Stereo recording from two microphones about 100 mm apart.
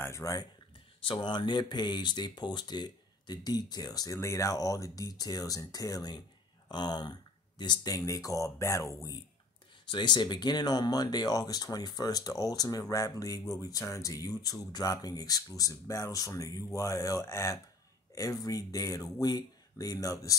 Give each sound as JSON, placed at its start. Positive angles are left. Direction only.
{"t": 0.0, "sound": "speech", "side_deg": 30}
{"t": 1.0, "sound": "speech", "side_deg": 55}
{"t": 9.8, "sound": "speech", "side_deg": 50}